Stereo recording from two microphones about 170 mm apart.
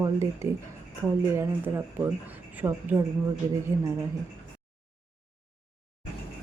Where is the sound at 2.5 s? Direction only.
10° right (ahead or behind).